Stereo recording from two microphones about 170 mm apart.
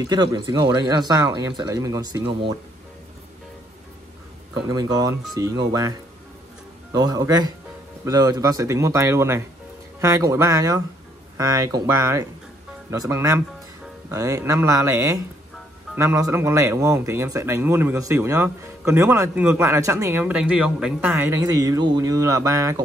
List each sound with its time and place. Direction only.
0.1 s speech: 25° right (ahead or behind)
4.6 s speech: 20° right (ahead or behind)